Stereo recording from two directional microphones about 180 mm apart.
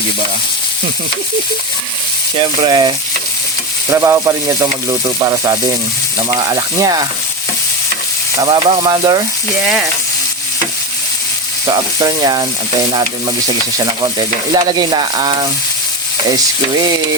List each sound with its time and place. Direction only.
2.4 s frying: 25° right (ahead or behind)
3.8 s speech: 15° right (ahead or behind)
6.2 s frying: 20° right (ahead or behind)
8.4 s frying: 25° right (ahead or behind)
11.6 s frying: 25° right (ahead or behind)
13.7 s frying: 25° right (ahead or behind)